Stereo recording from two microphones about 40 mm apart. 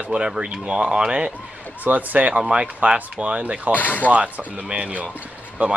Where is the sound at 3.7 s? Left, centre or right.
Left.